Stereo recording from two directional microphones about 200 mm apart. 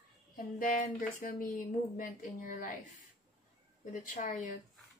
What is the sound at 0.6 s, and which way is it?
Speech, 40° left (ahead or behind).